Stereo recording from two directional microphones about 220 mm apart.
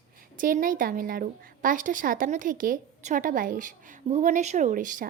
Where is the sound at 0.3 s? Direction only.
40° right (ahead or behind).